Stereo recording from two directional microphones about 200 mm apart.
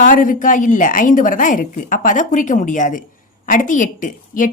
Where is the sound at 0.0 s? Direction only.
40° left (ahead or behind).